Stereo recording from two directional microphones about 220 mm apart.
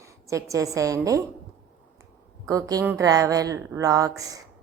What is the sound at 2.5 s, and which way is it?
A woman's voice, 15° right (ahead or behind).